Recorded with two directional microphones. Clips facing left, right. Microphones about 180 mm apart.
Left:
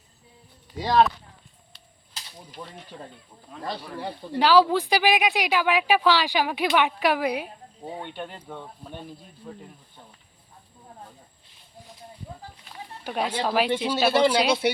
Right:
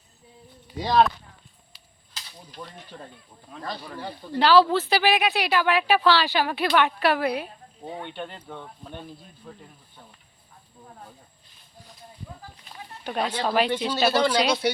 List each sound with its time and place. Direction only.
0.8 s speech: 5° left (ahead or behind)
2.5 s speech: 5° left (ahead or behind)
4.0 s speech: 20° left (ahead or behind)
4.4 s speech: 10° left (ahead or behind)
13.1 s speech: 10° left (ahead or behind)